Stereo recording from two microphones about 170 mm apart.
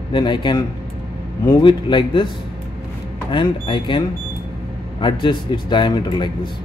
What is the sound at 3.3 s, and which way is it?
Speech, 30° left (ahead or behind).